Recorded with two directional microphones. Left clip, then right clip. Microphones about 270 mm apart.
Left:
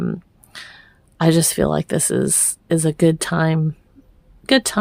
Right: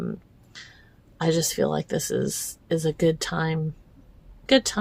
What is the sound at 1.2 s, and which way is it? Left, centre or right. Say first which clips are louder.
Speech: left 6 dB; left.